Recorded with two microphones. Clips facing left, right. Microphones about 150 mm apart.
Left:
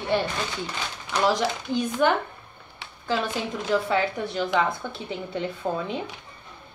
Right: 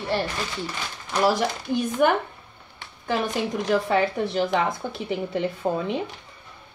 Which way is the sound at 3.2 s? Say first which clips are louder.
Right 3 dB; 15° right (ahead or behind).